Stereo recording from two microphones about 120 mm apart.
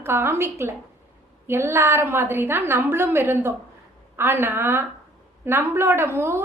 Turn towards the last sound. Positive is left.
turn(degrees=-20)  # may be behind; listen again after turning